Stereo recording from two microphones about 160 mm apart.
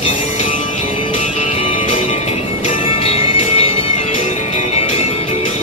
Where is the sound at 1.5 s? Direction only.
40° left (ahead or behind).